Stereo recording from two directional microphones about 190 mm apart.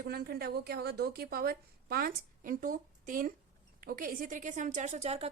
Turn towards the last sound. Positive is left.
turn(degrees=-35)  # may be behind; listen again after turning